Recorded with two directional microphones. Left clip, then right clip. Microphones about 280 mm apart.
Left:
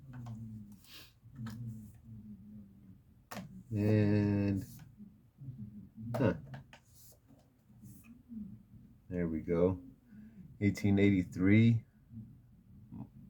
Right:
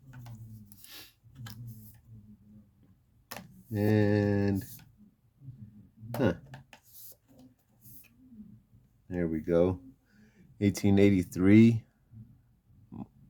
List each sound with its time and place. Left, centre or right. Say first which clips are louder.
3.8 s mantra: right 5 dB; right
9.0 s a sound: right 5 dB; right
10.6 s speech: right 6 dB; right